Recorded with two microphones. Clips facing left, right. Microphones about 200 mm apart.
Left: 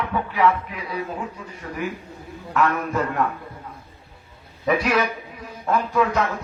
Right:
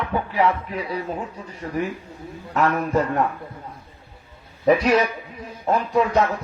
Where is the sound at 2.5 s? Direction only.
30° right (ahead or behind).